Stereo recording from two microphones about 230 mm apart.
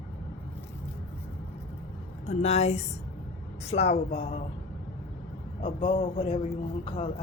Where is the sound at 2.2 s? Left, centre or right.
Left.